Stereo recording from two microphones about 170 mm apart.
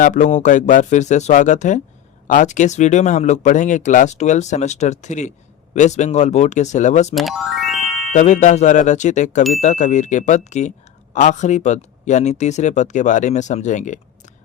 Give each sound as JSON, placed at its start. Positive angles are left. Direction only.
{"t": 0.0, "sound": "speech", "side_deg": 45}
{"t": 7.2, "sound": "speech", "side_deg": 0}
{"t": 8.1, "sound": "speech", "side_deg": 45}